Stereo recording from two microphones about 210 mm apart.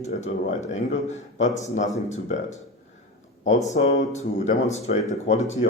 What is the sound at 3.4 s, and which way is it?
Speech, 30° left (ahead or behind).